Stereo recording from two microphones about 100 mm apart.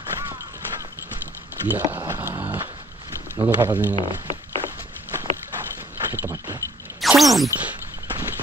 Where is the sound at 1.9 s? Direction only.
20° right (ahead or behind).